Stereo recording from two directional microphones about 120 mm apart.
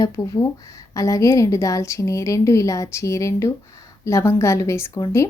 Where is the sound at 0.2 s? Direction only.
30° left (ahead or behind).